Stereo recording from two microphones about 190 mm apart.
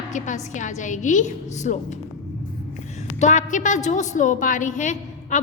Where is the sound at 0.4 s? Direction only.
40° left (ahead or behind).